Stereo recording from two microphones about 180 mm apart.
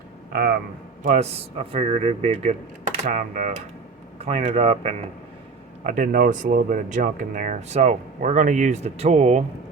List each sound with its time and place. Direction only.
1.0 s speech: 40° right (ahead or behind)
5.8 s speech: 45° right (ahead or behind)